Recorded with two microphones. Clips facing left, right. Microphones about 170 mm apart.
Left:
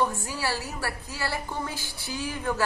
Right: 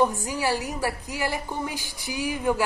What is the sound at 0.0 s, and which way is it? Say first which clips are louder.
A woman's voice: right 4 dB; 15° right (ahead or behind).